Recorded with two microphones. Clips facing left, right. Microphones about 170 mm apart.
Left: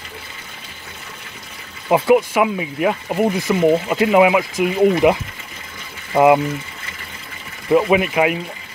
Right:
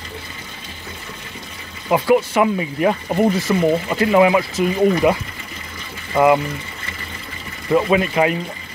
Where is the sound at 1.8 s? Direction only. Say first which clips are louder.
Left 2 dB; 25° left (ahead or behind).